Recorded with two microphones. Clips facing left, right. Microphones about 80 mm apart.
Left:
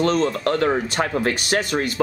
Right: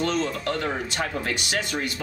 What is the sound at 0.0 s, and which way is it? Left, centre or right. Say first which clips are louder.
Speech: left 6 dB; left.